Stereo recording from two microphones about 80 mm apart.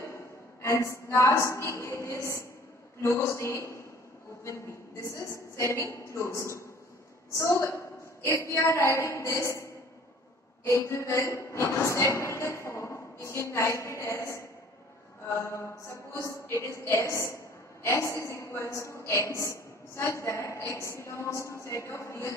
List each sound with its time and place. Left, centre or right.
0.0 s a woman's voice: left